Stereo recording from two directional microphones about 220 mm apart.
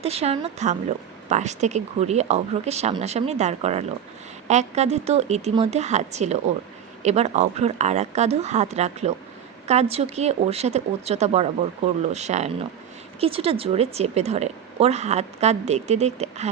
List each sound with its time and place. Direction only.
0.0 s a woman's voice: 30° right (ahead or behind)